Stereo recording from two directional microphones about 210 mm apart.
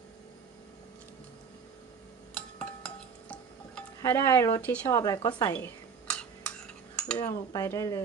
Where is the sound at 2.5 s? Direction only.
5° left (ahead or behind).